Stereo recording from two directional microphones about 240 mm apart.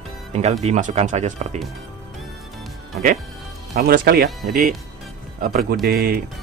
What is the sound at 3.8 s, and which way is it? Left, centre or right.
A man's voice, right.